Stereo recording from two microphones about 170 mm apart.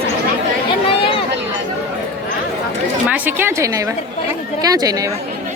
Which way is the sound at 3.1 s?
10° right (ahead or behind).